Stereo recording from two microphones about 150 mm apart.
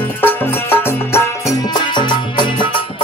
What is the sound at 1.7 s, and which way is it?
Music, 30° left (ahead or behind).